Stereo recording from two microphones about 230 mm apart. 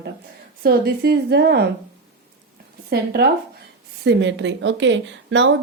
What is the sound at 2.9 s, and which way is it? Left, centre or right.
A woman's voice, right.